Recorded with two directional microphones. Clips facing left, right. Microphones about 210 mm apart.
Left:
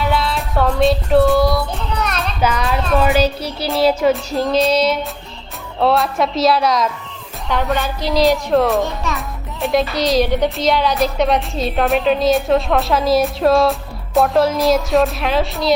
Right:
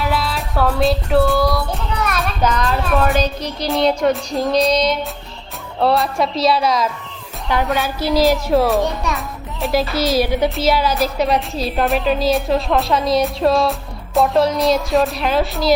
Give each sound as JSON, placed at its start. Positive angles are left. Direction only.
{"t": 0.0, "sound": "music", "side_deg": -5}
{"t": 2.4, "sound": "music", "side_deg": 10}